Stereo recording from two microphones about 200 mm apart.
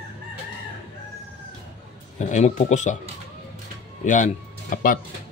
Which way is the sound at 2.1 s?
35° left (ahead or behind).